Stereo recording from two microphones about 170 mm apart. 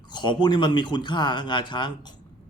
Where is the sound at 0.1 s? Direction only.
25° left (ahead or behind).